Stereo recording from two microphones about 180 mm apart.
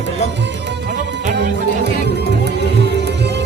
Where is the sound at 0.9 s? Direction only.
70° right (ahead or behind).